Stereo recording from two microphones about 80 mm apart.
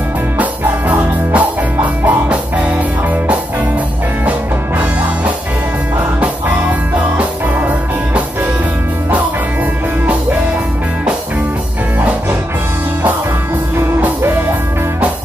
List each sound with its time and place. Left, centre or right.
0.4 s music: centre
7.2 s music: centre